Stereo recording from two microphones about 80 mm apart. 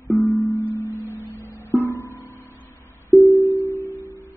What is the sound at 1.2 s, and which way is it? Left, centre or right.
Music, left.